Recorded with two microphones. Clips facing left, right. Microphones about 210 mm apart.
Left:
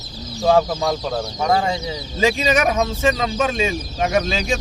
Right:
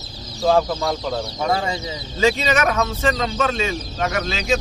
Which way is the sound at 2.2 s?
15° left (ahead or behind).